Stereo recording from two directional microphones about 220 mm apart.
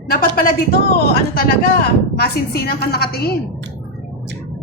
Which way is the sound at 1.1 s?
45° left (ahead or behind).